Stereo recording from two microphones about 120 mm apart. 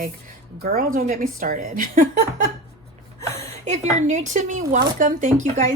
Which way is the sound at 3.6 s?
75° right (ahead or behind).